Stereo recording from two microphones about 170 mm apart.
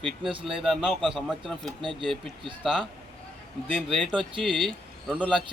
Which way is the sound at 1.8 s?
30° right (ahead or behind).